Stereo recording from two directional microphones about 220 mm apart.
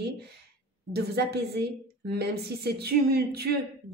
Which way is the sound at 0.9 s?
45° right (ahead or behind).